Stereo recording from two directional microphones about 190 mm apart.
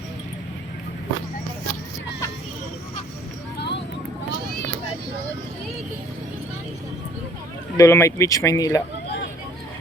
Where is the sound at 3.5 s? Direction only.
60° left (ahead or behind).